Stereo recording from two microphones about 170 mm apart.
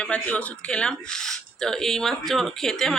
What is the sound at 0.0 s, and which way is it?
Speech, 5° left (ahead or behind).